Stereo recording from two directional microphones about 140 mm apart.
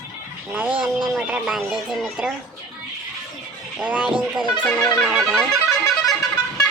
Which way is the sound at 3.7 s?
10° right (ahead or behind).